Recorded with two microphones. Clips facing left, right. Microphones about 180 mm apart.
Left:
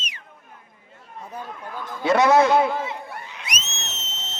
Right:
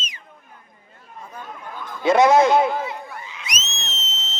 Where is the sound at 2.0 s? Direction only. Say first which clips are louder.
Right 2 dB; 15° right (ahead or behind).